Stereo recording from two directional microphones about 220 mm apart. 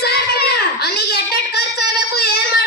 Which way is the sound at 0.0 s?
45° left (ahead or behind).